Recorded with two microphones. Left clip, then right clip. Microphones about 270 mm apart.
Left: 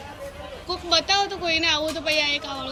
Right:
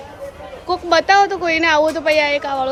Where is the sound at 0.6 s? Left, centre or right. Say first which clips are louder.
Right 8 dB; centre.